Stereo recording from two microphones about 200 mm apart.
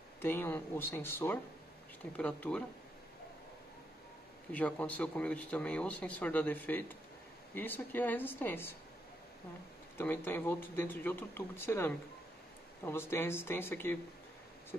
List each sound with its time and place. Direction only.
0.2 s speech: 10° left (ahead or behind)
4.5 s speech: 5° left (ahead or behind)
9.9 s speech: 10° left (ahead or behind)